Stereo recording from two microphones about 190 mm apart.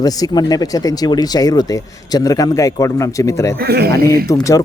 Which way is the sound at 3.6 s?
55° right (ahead or behind).